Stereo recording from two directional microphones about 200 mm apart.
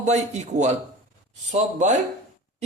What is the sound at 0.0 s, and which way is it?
A man's voice, 35° right (ahead or behind).